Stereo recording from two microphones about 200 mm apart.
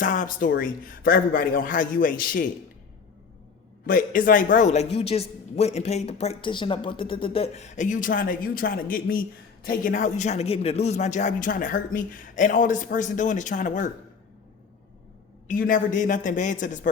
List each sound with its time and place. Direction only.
0.0 s a man's voice: 40° left (ahead or behind)
3.8 s a woman's voice: 45° left (ahead or behind)
15.4 s a woman's voice: 45° left (ahead or behind)